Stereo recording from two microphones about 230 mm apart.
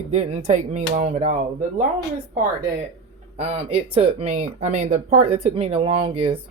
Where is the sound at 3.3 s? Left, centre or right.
Right.